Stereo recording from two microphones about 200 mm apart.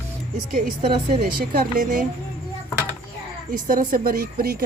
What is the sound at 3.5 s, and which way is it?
A woman's voice, 45° right (ahead or behind).